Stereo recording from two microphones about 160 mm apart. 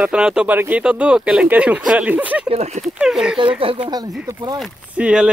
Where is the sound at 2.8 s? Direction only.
5° right (ahead or behind).